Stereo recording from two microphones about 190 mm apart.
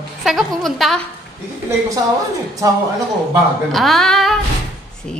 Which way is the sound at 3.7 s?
Centre (ahead or behind).